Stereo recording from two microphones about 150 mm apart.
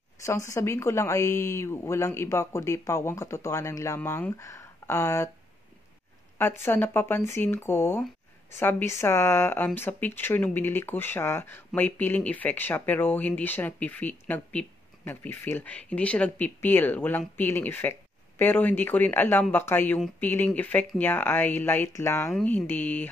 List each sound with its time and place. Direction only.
0.2 s a woman's voice: 20° left (ahead or behind)
6.3 s speech: 15° left (ahead or behind)